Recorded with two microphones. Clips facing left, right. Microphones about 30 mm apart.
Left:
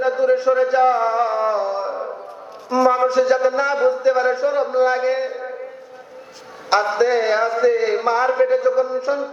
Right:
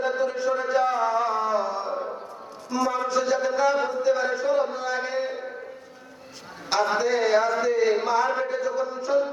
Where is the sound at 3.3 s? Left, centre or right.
Left.